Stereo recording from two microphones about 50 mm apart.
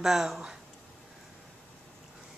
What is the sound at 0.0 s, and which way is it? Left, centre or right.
Speech, centre.